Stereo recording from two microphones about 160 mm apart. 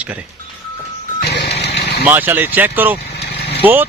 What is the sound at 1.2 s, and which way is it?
Vehicle, 90° left.